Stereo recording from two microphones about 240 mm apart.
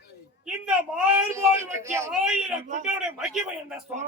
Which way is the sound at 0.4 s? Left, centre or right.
Centre.